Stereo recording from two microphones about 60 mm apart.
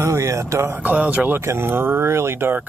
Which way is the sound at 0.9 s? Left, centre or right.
Right.